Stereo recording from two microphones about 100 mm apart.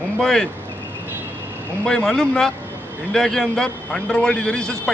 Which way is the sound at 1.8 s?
5° left (ahead or behind).